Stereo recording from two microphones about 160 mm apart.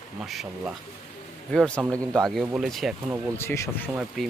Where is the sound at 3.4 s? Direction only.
15° left (ahead or behind).